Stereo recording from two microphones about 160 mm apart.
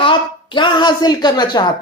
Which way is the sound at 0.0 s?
30° left (ahead or behind).